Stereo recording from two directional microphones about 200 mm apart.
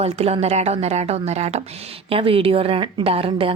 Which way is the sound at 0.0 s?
30° right (ahead or behind).